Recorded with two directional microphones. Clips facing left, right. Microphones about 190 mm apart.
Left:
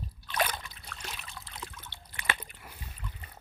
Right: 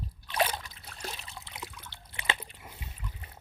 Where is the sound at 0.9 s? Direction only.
35° right (ahead or behind).